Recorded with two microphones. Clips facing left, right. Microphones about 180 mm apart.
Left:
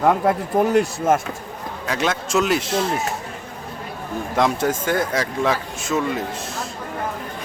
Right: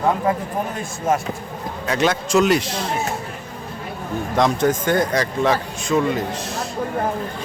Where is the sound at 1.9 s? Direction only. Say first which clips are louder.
Right 3 dB; centre (ahead or behind).